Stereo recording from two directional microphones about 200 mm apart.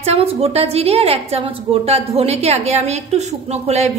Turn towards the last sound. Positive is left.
turn(degrees=-35)  # may be behind; listen again after turning